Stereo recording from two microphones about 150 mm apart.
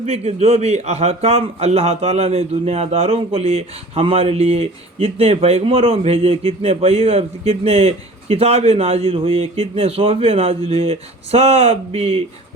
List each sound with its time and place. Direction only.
0.0 s a man's voice: 45° right (ahead or behind)